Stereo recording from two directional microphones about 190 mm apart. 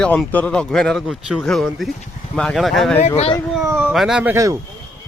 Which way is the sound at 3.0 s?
35° left (ahead or behind).